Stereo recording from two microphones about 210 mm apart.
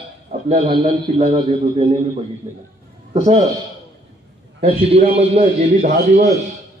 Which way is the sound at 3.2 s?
35° right (ahead or behind).